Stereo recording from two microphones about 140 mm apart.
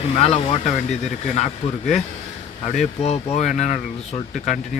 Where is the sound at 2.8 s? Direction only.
50° left (ahead or behind).